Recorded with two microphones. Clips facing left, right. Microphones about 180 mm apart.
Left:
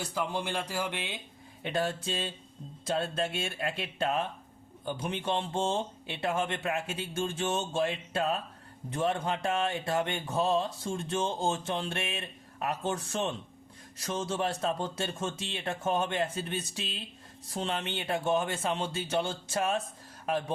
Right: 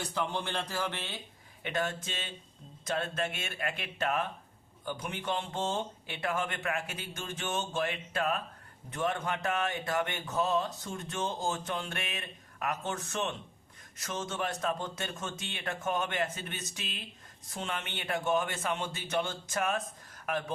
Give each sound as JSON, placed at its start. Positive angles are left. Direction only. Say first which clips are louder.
{"t": 0.0, "sound": "speech", "louder": "left 1 dB", "side_deg": 10}
{"t": 1.6, "sound": "speech", "louder": "left 3 dB", "side_deg": 35}